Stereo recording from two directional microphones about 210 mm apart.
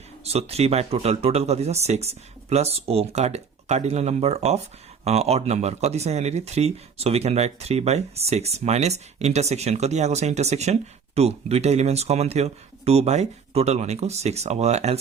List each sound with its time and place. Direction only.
0.3 s speech: 30° right (ahead or behind)